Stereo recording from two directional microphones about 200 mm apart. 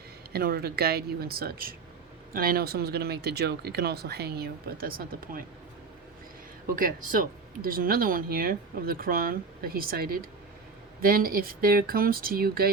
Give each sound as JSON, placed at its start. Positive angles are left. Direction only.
{"t": 0.3, "sound": "speech", "side_deg": -50}
{"t": 6.7, "sound": "speech", "side_deg": -45}